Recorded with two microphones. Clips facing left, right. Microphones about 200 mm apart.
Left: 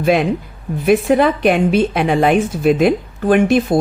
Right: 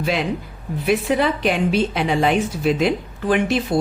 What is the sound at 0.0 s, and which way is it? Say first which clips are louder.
A woman's voice: left 7 dB; 55° left (ahead or behind).